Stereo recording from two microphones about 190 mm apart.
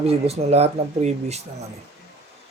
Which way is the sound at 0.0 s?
30° right (ahead or behind).